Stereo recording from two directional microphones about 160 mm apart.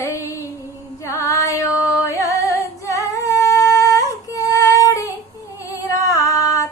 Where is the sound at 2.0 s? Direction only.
20° left (ahead or behind).